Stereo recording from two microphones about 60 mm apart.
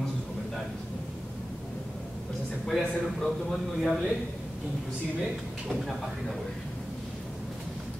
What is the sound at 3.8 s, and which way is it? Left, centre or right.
Speech, centre.